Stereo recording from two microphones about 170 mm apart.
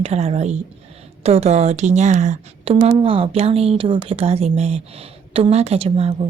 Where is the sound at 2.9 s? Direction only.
30° right (ahead or behind).